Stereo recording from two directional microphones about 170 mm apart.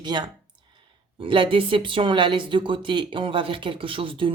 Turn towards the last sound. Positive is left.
turn(degrees=-30)  # may be behind; listen again after turning